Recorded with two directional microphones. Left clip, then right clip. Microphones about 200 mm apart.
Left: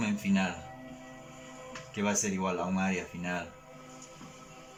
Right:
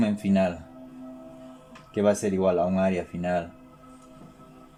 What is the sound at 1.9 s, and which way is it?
Speech, 50° right (ahead or behind).